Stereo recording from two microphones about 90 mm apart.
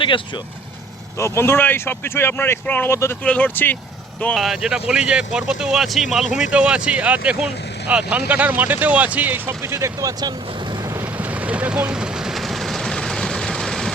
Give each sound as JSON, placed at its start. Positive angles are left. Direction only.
{"t": 1.2, "sound": "speech", "side_deg": 30}
{"t": 4.4, "sound": "speech", "side_deg": -5}
{"t": 9.5, "sound": "speech", "side_deg": -30}
{"t": 11.2, "sound": "vehicle", "side_deg": -15}